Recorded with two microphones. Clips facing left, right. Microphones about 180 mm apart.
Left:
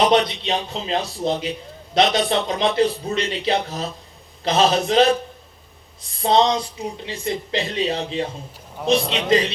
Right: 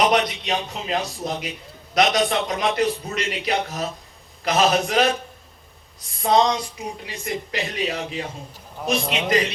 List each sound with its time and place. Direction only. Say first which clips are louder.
0.0 s a man's voice: left 2 dB; 30° left (ahead or behind)
6.2 s a sound: left 1 dB; 30° left (ahead or behind)
7.0 s a man's voice: left 4 dB; 30° left (ahead or behind)